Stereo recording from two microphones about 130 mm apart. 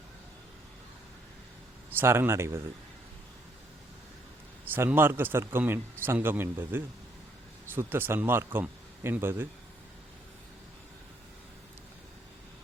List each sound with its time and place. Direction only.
2.0 s speech: 20° right (ahead or behind)
4.7 s speech: 15° right (ahead or behind)